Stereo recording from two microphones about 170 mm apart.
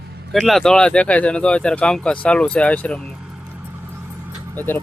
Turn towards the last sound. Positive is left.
turn(degrees=10)  # may be behind; listen again after turning